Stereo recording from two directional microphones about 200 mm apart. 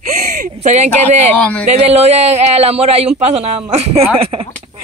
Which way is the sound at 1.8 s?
35° right (ahead or behind).